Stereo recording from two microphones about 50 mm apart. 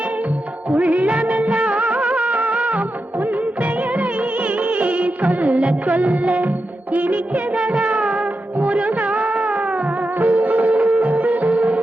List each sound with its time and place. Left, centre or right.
0.7 s music of bollywood: right
7.5 s music: right